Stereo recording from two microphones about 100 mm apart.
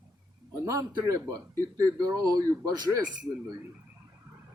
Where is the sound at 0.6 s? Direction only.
35° right (ahead or behind).